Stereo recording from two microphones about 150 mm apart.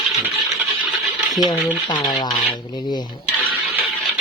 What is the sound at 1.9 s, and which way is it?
Speech, 30° left (ahead or behind).